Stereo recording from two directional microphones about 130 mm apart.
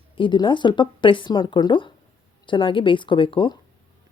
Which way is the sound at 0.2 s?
40° left (ahead or behind).